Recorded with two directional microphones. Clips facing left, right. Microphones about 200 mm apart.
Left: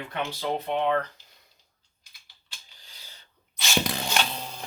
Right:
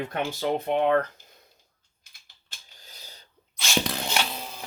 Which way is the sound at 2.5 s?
45° right (ahead or behind).